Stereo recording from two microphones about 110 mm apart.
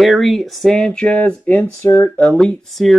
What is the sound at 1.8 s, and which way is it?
Speech, 20° left (ahead or behind).